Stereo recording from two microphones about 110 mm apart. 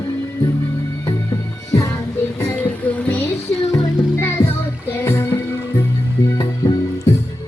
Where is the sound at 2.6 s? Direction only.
10° left (ahead or behind).